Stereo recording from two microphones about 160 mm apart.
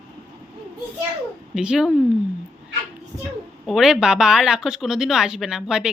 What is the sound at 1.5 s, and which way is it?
Speech, 5° right (ahead or behind).